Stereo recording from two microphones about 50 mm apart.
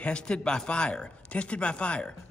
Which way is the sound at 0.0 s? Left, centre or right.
Centre.